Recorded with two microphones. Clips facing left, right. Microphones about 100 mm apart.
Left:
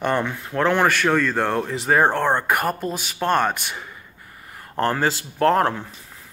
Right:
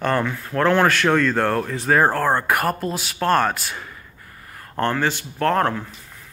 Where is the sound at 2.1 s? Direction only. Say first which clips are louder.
Right 1 dB; 20° left (ahead or behind).